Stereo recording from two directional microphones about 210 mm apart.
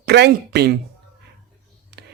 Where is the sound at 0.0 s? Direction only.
50° right (ahead or behind).